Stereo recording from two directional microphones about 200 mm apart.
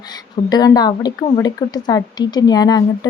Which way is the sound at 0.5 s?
20° left (ahead or behind).